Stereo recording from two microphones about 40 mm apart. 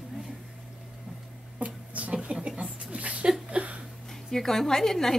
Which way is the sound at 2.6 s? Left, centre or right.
Right.